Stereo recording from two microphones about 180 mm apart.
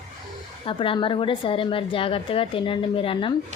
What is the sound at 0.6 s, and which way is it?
A woman's voice, 30° left (ahead or behind).